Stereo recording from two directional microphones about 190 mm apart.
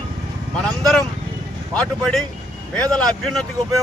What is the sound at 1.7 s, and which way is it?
A man's voice, 5° left (ahead or behind).